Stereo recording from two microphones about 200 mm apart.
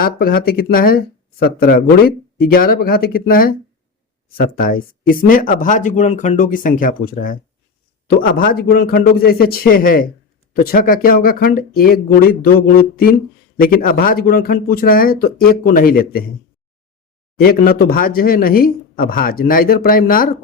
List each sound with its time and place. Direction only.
0.0 s speech: 45° left (ahead or behind)
17.3 s speech: 50° left (ahead or behind)